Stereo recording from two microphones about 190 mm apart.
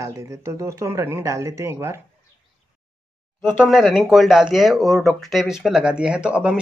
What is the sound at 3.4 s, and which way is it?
Speech, 5° right (ahead or behind).